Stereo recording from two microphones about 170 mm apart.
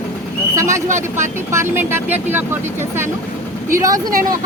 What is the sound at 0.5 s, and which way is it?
Speech, 15° right (ahead or behind).